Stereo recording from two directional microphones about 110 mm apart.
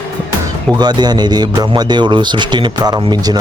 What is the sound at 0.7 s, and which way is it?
Speech, 40° right (ahead or behind).